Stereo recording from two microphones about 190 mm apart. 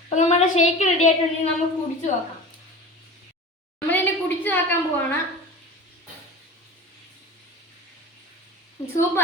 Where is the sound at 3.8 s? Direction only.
10° left (ahead or behind).